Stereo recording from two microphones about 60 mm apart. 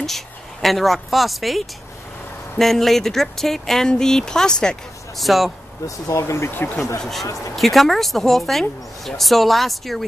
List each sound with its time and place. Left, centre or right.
0.0 s speech: centre
5.1 s speech: centre
5.9 s speech: left
6.5 s speech: left
7.0 s speech: centre